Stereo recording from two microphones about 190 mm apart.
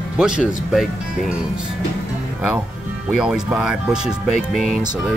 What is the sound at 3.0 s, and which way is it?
Speech, 5° right (ahead or behind).